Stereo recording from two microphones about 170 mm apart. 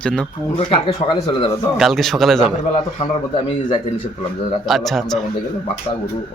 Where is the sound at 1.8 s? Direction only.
Centre (ahead or behind).